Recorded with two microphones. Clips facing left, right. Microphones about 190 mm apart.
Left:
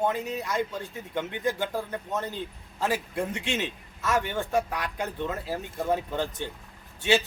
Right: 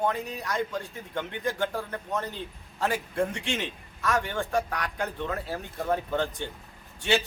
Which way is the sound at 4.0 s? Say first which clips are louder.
Left 1 dB; 20° left (ahead or behind).